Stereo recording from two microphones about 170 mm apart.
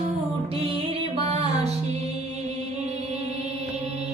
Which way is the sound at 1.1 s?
35° right (ahead or behind).